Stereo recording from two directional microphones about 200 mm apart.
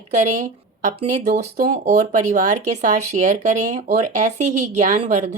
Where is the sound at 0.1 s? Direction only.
35° right (ahead or behind).